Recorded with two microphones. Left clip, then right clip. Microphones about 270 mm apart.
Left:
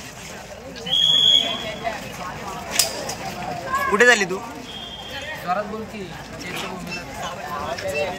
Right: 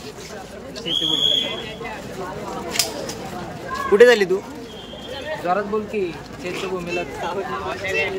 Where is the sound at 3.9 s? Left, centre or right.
Centre.